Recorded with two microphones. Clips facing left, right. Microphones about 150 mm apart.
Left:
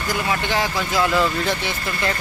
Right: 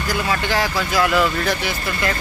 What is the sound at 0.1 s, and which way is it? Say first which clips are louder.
Speech: right 1 dB; 20° left (ahead or behind).